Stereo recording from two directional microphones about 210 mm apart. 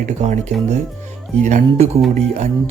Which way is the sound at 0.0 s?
35° right (ahead or behind).